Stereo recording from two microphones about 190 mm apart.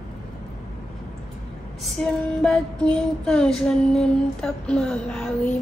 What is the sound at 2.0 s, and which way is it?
Female singing, 5° left (ahead or behind).